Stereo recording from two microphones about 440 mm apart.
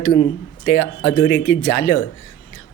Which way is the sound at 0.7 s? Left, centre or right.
Centre.